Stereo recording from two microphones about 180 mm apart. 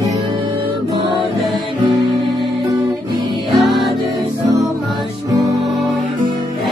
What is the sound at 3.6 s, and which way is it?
Music, centre (ahead or behind).